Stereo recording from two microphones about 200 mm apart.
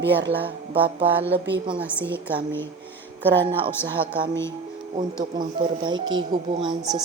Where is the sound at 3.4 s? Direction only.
25° right (ahead or behind).